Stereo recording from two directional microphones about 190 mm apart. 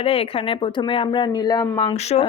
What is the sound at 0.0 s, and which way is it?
A woman's voice, 30° left (ahead or behind).